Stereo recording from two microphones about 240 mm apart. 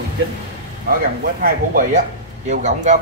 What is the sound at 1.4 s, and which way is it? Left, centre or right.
Speech, right.